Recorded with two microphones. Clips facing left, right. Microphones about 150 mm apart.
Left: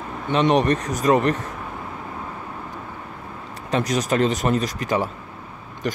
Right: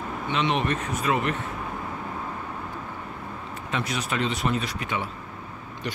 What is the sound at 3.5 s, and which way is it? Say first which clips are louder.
Speech: left 8 dB; 40° left (ahead or behind).